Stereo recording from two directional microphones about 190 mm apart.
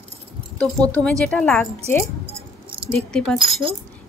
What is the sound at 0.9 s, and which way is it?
Speech, 5° left (ahead or behind).